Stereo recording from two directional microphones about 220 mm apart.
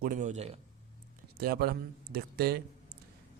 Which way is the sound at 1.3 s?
45° right (ahead or behind).